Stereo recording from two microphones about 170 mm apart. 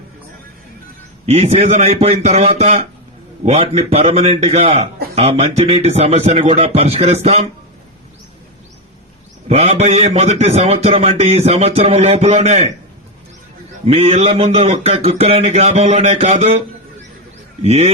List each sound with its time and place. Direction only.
1.3 s a man's voice: 40° right (ahead or behind)
9.5 s a man's voice: 35° right (ahead or behind)
13.8 s a man's voice: 35° right (ahead or behind)